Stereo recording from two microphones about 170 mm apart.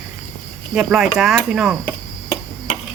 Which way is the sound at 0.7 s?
Centre (ahead or behind).